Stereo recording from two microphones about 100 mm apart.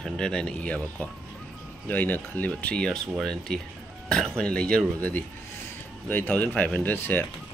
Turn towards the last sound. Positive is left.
turn(degrees=20)  # may be behind; listen again after turning